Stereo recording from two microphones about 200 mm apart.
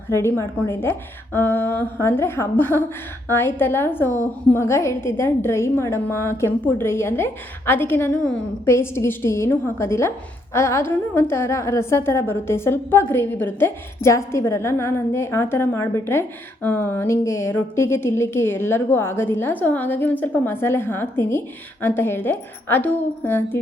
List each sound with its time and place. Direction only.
0.1 s speech: 15° left (ahead or behind)